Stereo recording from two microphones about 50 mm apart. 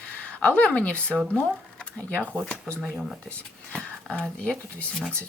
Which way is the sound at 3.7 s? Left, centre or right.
Centre.